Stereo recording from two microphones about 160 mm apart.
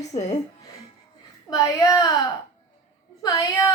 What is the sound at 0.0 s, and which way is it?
Speech, 45° left (ahead or behind).